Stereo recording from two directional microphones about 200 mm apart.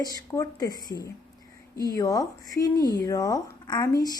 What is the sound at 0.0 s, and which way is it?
Speech, 15° left (ahead or behind).